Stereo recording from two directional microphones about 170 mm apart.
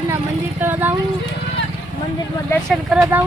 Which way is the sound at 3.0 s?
15° right (ahead or behind).